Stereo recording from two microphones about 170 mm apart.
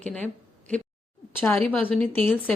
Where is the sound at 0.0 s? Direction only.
5° left (ahead or behind).